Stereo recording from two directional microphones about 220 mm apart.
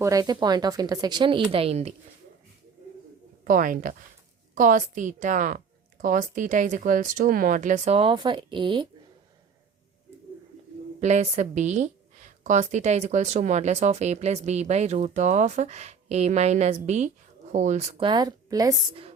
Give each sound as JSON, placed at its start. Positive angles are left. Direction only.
{"t": 0.0, "sound": "speech", "side_deg": -15}
{"t": 3.4, "sound": "a woman's voice", "side_deg": -40}
{"t": 11.0, "sound": "a woman's voice", "side_deg": -30}